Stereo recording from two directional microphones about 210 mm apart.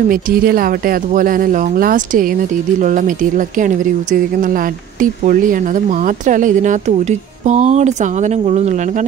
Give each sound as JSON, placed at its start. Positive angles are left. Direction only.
{"t": 0.1, "sound": "speech", "side_deg": -45}